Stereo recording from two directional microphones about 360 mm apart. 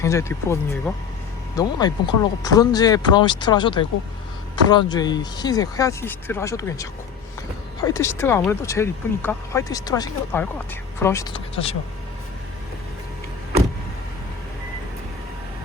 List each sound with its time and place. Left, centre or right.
0.0 s speech: centre